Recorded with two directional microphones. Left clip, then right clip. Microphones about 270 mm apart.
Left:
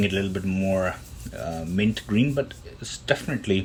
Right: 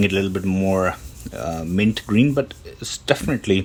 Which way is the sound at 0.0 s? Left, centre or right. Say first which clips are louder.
Right 5 dB; centre.